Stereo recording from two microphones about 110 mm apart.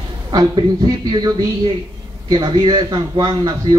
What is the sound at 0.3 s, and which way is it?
A man's voice, 40° right (ahead or behind).